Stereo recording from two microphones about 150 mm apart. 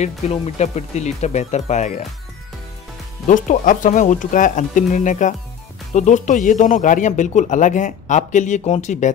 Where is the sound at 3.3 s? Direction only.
60° left (ahead or behind).